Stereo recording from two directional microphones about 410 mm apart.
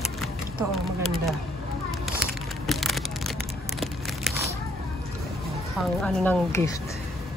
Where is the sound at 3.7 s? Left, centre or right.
Centre.